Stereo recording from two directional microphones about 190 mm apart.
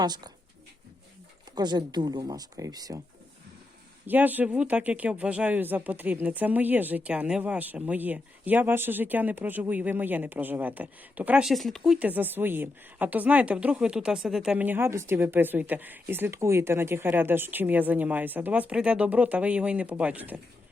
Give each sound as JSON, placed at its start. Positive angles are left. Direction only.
{"t": 0.0, "sound": "speech", "side_deg": -20}
{"t": 1.5, "sound": "speech", "side_deg": -25}
{"t": 4.0, "sound": "speech", "side_deg": -10}